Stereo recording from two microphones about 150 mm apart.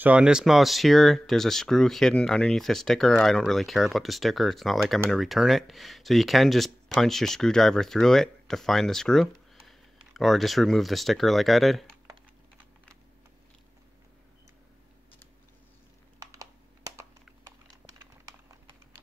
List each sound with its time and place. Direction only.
0.0 s speech: 5° right (ahead or behind)
16.2 s typing: 20° right (ahead or behind)